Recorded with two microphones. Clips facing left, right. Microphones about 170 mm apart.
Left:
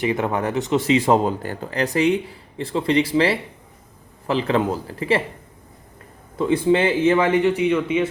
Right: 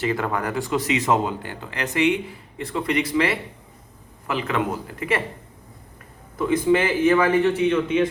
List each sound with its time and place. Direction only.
0.0 s a man's voice: 20° left (ahead or behind)
6.3 s a man's voice: 30° left (ahead or behind); by 8.0 s 10° left (ahead or behind)